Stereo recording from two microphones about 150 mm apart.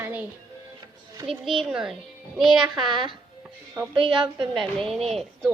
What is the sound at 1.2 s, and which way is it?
A child's voice, centre (ahead or behind).